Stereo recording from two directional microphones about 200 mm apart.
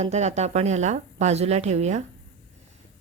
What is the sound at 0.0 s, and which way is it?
Speech, 35° right (ahead or behind).